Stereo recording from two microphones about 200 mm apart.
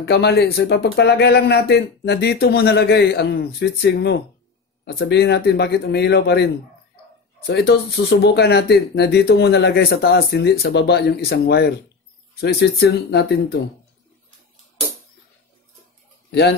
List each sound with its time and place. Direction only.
0.0 s speech: 55° left (ahead or behind)
16.3 s speech: 55° left (ahead or behind)